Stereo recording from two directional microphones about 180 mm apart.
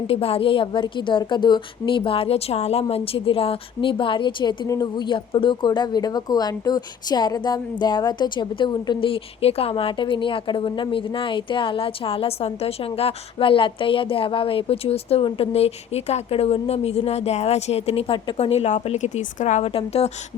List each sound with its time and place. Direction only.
0.1 s a woman's voice: 30° left (ahead or behind)